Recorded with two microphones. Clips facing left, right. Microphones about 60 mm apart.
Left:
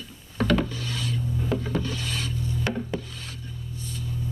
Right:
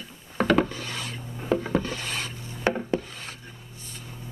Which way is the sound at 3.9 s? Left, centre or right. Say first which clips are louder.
Left 7 dB; right.